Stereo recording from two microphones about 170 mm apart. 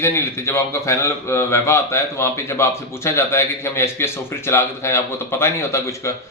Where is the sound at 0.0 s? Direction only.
15° left (ahead or behind).